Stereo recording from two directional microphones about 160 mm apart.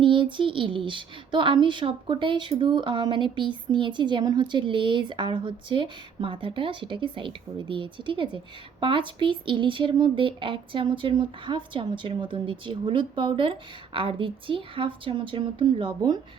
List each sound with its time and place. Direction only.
0.0 s speech: 30° right (ahead or behind)